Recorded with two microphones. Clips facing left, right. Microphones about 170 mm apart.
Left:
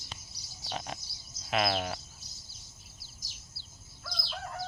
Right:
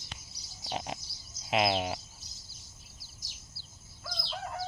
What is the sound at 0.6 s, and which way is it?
Frog, 20° right (ahead or behind).